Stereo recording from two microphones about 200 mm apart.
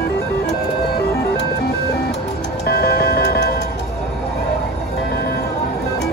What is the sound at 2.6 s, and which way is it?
Music, 50° left (ahead or behind).